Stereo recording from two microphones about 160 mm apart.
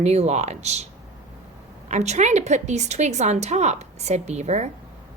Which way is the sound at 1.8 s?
45° right (ahead or behind).